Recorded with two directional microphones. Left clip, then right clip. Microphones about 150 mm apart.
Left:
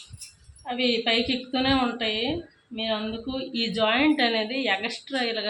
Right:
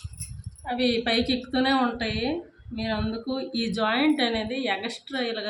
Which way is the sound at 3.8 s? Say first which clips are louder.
Left 1 dB; 25° left (ahead or behind).